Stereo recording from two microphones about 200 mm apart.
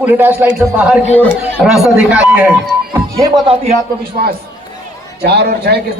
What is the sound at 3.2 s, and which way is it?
Speech, 25° right (ahead or behind).